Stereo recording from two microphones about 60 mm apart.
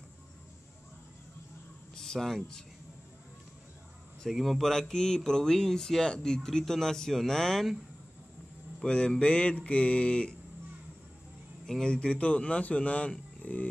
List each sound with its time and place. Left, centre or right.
2.0 s speech: centre
4.2 s speech: centre
8.8 s speech: centre
11.6 s speech: centre
13.4 s a sound: left